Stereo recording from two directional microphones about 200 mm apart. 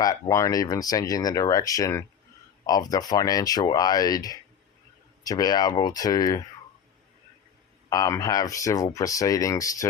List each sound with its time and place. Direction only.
0.0 s speech: 15° left (ahead or behind)
7.9 s speech: 15° left (ahead or behind)